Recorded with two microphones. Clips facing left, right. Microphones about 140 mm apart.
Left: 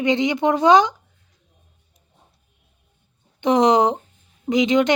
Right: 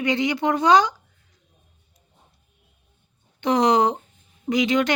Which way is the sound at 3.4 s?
20° left (ahead or behind).